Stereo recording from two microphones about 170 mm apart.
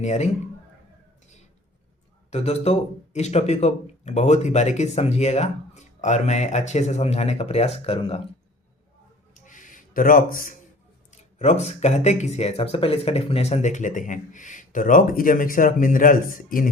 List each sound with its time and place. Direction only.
0.0 s speech: 40° left (ahead or behind)
2.3 s speech: 40° left (ahead or behind)
9.3 s a sound: 50° left (ahead or behind)
11.1 s speech: 40° left (ahead or behind)